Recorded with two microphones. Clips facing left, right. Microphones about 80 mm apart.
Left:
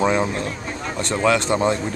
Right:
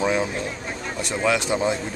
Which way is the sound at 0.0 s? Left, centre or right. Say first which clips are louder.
Left 3 dB; centre.